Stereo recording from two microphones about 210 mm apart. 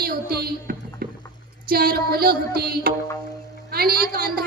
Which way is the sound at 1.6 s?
45° right (ahead or behind).